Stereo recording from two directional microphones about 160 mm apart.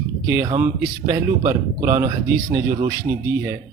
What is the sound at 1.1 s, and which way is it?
A man's voice, 20° right (ahead or behind).